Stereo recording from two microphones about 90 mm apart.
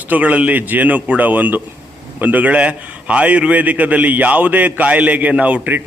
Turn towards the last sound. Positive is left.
turn(degrees=-20)  # may be behind; listen again after turning